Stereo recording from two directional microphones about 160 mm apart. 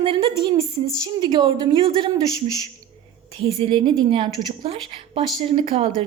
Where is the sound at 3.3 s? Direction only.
35° right (ahead or behind).